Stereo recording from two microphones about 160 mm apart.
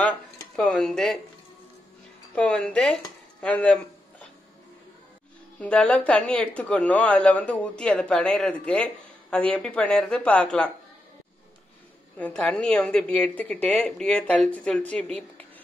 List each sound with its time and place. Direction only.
0.0 s speech: 5° left (ahead or behind)
2.3 s speech: 5° left (ahead or behind)
3.3 s a sound: 5° left (ahead or behind)
5.6 s speech: 5° left (ahead or behind)
12.2 s speech: 5° left (ahead or behind)